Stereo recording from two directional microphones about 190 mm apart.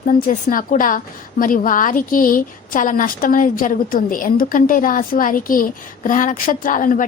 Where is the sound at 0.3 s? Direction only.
45° left (ahead or behind).